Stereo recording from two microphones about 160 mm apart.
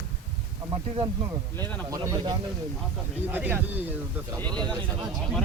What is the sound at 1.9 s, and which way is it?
Speech, 20° right (ahead or behind).